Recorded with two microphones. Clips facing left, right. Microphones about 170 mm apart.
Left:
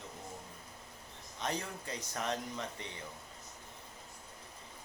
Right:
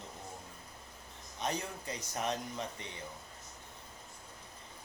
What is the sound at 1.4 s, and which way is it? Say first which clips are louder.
Speech: right 1 dB; 15° right (ahead or behind).